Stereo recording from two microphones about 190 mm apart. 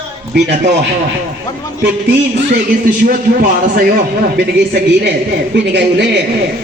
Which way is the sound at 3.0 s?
50° right (ahead or behind).